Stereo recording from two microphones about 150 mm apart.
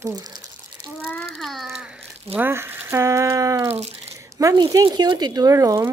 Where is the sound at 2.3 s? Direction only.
15° right (ahead or behind).